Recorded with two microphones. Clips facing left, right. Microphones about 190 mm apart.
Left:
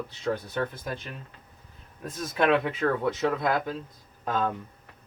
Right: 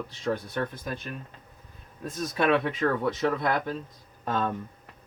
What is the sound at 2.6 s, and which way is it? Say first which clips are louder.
Speech: even; 5° left (ahead or behind).